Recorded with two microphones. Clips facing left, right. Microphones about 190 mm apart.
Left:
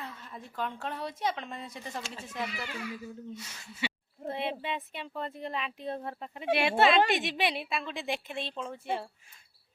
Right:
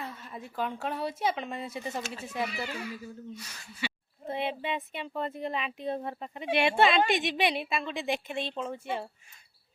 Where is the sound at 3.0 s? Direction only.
25° left (ahead or behind).